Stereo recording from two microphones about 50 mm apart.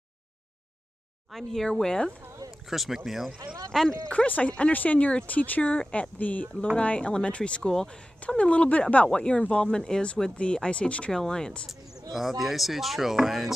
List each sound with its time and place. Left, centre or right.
1.3 s speech: centre
2.6 s speech: centre
3.9 s speech: centre
7.7 s speech: centre
8.4 s speech: left
11.1 s speech: centre
12.1 s speech: centre